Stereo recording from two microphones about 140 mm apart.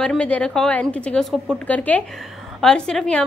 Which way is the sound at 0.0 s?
5° left (ahead or behind).